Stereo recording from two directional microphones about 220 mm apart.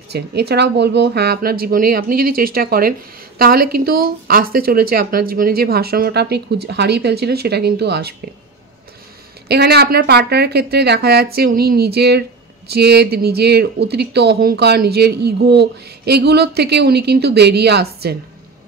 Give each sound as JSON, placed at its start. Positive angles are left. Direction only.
{"t": 0.1, "sound": "speech", "side_deg": -50}
{"t": 9.5, "sound": "speech", "side_deg": -45}